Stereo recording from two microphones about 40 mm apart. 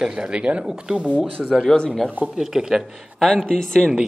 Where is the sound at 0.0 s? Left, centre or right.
Centre.